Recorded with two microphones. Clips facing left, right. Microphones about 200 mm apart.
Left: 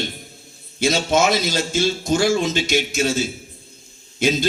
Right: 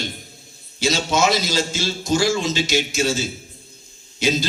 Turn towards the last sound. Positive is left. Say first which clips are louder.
# left 2 dB
turn(degrees=55)  # may be behind; listen again after turning